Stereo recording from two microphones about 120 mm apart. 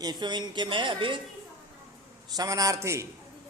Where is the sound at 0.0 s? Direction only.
35° right (ahead or behind).